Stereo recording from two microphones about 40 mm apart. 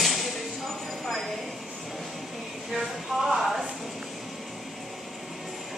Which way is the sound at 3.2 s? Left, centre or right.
Centre.